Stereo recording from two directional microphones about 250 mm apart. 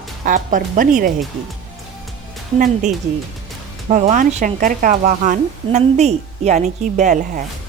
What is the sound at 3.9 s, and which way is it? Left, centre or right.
A woman's voice, right.